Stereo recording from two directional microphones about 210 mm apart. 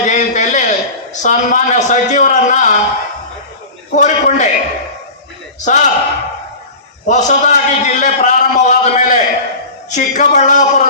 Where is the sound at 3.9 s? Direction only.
35° left (ahead or behind).